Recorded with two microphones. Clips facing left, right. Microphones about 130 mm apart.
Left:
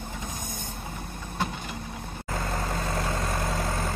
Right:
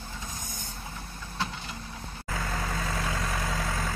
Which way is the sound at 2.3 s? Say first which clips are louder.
Left 2 dB; 35° left (ahead or behind).